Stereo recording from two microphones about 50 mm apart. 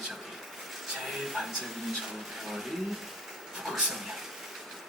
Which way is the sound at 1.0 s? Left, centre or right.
Centre.